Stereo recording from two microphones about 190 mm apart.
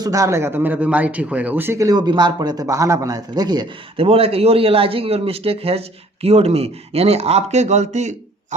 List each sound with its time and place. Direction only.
0.0 s speech: 15° right (ahead or behind); by 8.5 s 40° right (ahead or behind)